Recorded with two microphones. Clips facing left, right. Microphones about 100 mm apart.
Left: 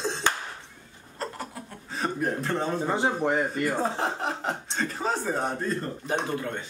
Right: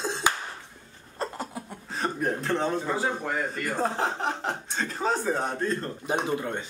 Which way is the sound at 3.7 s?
Centre (ahead or behind).